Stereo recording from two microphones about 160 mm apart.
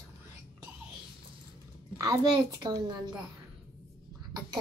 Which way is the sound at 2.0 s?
25° right (ahead or behind).